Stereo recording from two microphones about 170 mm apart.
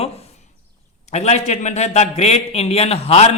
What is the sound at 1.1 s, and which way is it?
A man's voice, 40° left (ahead or behind).